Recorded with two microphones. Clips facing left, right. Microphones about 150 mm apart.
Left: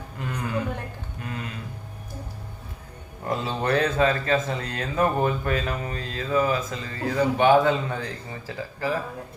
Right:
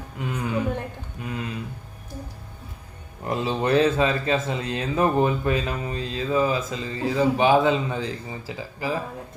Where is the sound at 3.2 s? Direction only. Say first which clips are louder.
Right 2 dB; 20° right (ahead or behind).